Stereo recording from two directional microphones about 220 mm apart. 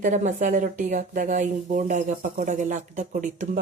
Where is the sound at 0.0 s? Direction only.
35° right (ahead or behind).